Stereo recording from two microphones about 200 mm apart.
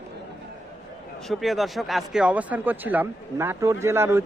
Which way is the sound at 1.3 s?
Centre (ahead or behind).